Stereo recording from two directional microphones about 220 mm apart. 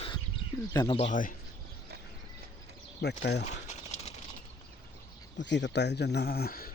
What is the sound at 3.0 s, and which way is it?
Speech, 50° left (ahead or behind).